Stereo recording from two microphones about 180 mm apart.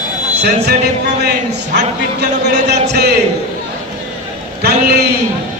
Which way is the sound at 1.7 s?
70° right (ahead or behind).